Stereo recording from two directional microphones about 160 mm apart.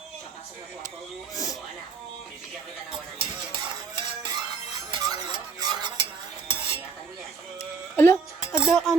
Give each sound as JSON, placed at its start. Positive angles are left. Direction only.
{"t": 3.2, "sound": "a sound", "side_deg": -30}
{"t": 4.9, "sound": "stir", "side_deg": -25}
{"t": 6.5, "sound": "cutlery", "side_deg": -35}
{"t": 7.9, "sound": "music", "side_deg": 15}
{"t": 8.5, "sound": "speech", "side_deg": 0}